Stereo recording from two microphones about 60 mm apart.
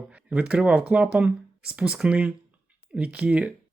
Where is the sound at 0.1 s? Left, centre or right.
Right.